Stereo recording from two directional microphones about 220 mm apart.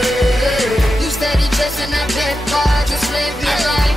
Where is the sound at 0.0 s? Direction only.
Centre (ahead or behind).